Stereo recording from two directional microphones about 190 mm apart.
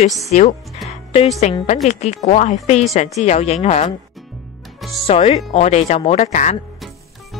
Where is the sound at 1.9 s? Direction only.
35° left (ahead or behind).